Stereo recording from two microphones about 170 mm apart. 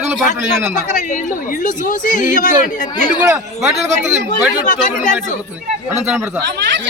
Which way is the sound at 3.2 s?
15° right (ahead or behind).